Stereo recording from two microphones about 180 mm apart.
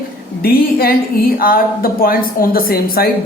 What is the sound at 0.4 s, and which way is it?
A woman's voice, 55° left (ahead or behind).